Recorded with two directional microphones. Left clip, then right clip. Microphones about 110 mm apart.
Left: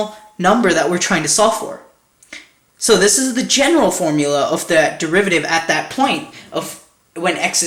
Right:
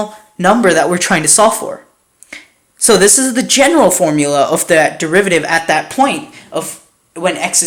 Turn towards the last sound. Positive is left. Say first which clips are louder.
# right 2 dB
turn(degrees=-35)  # may be behind; listen again after turning